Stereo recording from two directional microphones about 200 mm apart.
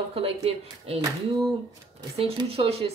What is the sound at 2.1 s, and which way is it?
Speech, 30° right (ahead or behind).